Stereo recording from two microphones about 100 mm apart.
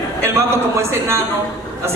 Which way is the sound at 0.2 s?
25° right (ahead or behind).